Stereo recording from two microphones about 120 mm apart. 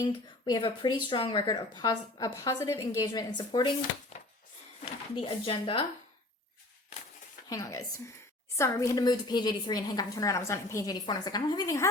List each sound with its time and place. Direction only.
0.1 s a woman's voice: 40° left (ahead or behind)
5.1 s speech: 45° left (ahead or behind)
7.5 s a woman's voice: 25° left (ahead or behind)